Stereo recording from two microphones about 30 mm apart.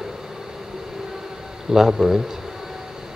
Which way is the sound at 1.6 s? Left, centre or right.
Centre.